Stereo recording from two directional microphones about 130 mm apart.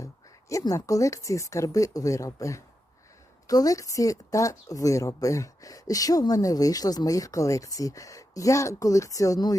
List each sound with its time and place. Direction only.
0.0 s a woman's voice: 25° left (ahead or behind)